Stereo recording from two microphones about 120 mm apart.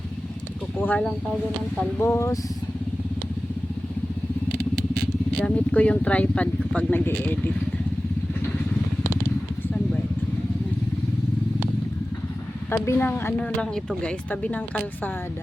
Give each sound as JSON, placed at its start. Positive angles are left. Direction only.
{"t": 0.8, "sound": "speech", "side_deg": 10}
{"t": 2.0, "sound": "speech", "side_deg": 25}
{"t": 5.4, "sound": "speech", "side_deg": 10}
{"t": 12.7, "sound": "speech", "side_deg": 20}